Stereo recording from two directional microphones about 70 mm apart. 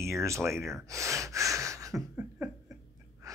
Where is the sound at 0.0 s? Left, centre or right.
Right.